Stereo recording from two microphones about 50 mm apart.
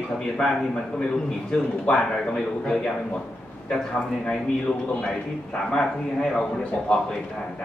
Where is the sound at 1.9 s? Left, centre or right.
Centre.